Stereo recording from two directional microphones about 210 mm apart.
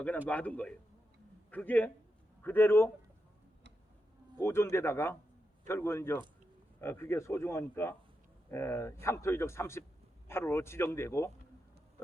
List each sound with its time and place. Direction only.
0.3 s a man's voice: 5° left (ahead or behind)
4.4 s a man's voice: 10° left (ahead or behind)